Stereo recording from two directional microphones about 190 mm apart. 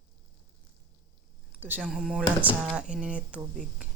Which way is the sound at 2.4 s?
10° right (ahead or behind).